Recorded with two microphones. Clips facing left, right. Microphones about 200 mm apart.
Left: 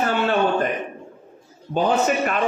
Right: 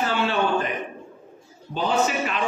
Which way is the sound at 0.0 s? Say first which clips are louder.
Left 3 dB; 50° left (ahead or behind).